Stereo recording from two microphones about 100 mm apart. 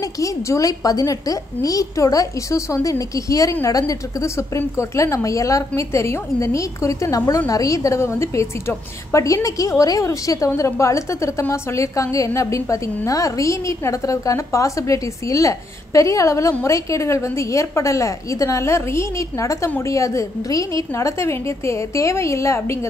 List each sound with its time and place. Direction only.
0.0 s a woman's voice: 35° left (ahead or behind)